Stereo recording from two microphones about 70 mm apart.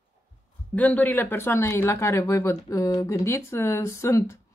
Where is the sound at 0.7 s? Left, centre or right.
Left.